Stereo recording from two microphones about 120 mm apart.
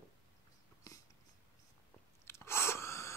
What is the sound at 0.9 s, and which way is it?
Dog, 30° left (ahead or behind).